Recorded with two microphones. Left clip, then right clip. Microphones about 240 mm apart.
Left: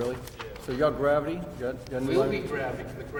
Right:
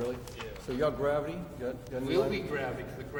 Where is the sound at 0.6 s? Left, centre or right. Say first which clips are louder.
Left 5 dB; left.